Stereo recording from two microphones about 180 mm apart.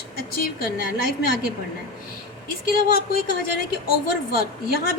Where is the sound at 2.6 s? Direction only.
55° left (ahead or behind).